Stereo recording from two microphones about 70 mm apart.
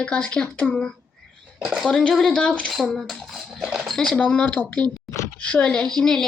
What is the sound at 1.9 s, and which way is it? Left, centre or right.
A woman's voice, centre.